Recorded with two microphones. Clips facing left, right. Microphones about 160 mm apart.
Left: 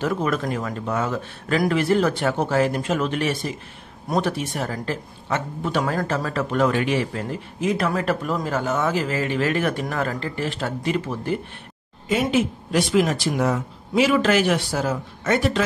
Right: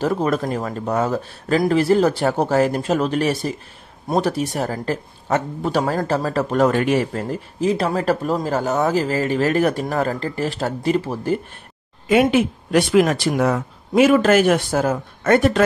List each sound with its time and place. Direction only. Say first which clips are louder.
0.0 s speech: right 3 dB; 35° right (ahead or behind)
12.1 s speech: right 5 dB; 60° right (ahead or behind)